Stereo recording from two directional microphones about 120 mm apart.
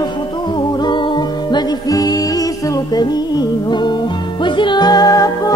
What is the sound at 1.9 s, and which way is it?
Music, 30° left (ahead or behind).